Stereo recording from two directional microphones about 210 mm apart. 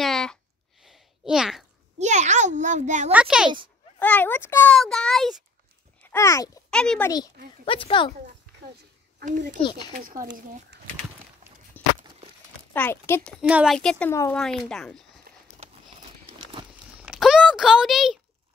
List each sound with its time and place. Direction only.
0.0 s a sound: centre (ahead or behind)
2.0 s a child's voice: 35° right (ahead or behind)
3.1 s speech: 5° right (ahead or behind)
4.0 s a child's voice: 10° left (ahead or behind)
6.0 s a child's voice: 15° left (ahead or behind)
6.7 s speech: 5° left (ahead or behind)
7.6 s speech: 25° left (ahead or behind)
9.9 s a child's voice: 40° right (ahead or behind)
12.7 s a child's voice: 10° left (ahead or behind)
13.4 s speech: 5° right (ahead or behind)
13.7 s speech: 5° left (ahead or behind)
16.3 s a sound: 25° right (ahead or behind)
17.0 s a sound: 5° right (ahead or behind)